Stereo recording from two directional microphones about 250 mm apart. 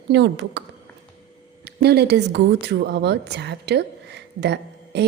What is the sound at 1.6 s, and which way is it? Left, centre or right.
Speech, right.